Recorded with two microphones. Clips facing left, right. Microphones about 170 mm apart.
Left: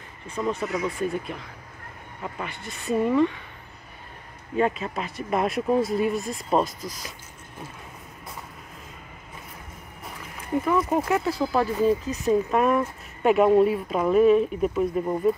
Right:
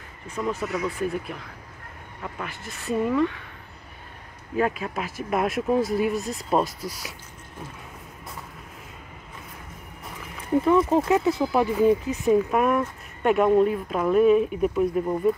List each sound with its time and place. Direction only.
0.4 s speech: centre (ahead or behind)
4.6 s speech: centre (ahead or behind)
10.6 s speech: 25° right (ahead or behind)
12.3 s speech: 5° right (ahead or behind)